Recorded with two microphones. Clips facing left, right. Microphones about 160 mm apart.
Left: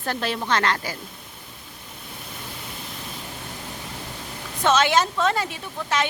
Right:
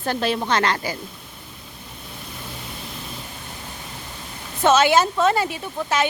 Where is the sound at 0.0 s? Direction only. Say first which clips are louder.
Right 4 dB; 20° right (ahead or behind).